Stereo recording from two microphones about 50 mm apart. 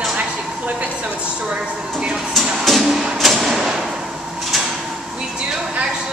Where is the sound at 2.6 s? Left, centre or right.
Centre.